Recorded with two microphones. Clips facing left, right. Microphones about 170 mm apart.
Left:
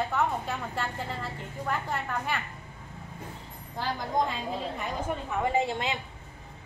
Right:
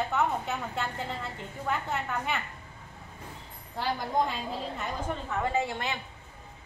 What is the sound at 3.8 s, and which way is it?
Speech, 5° right (ahead or behind).